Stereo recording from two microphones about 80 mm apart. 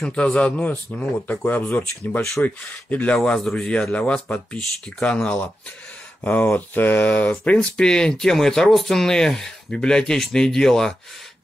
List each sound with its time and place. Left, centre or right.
0.0 s speech: centre
3.2 s speech: centre